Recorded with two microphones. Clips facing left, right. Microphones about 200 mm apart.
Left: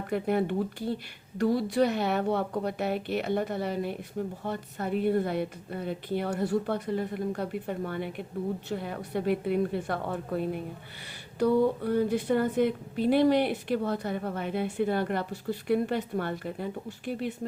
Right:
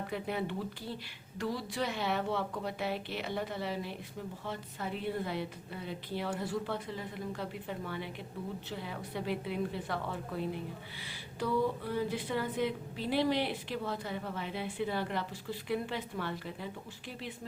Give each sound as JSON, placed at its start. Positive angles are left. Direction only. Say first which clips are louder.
{"t": 0.1, "sound": "speech", "louder": "left 11 dB", "side_deg": 50}